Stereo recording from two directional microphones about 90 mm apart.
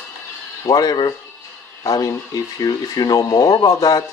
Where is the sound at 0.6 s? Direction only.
45° left (ahead or behind).